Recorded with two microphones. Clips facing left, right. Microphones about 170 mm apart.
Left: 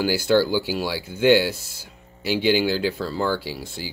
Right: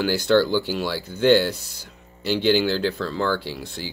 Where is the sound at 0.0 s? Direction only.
10° left (ahead or behind).